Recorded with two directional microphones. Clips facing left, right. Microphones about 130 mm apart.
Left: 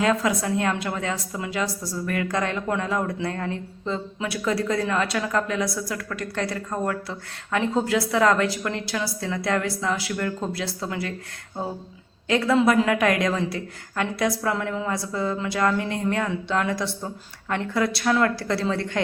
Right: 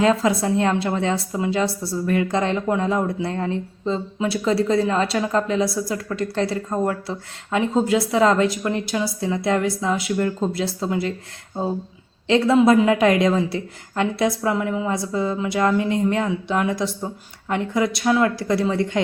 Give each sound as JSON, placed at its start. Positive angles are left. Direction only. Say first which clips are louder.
{"t": 0.0, "sound": "a woman's voice", "louder": "right 4 dB", "side_deg": -25}
{"t": 12.3, "sound": "a woman's voice", "louder": "right 4 dB", "side_deg": -25}
{"t": 14.5, "sound": "a woman's voice", "louder": "right 4 dB", "side_deg": -15}